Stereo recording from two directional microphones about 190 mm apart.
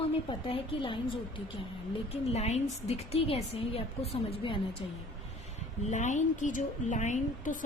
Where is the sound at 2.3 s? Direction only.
35° left (ahead or behind).